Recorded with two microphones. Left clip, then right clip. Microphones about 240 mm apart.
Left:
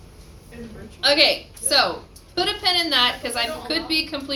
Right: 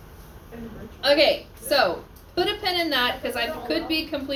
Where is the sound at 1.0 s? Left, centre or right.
Centre.